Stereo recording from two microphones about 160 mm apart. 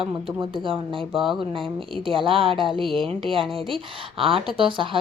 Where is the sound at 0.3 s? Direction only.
30° right (ahead or behind).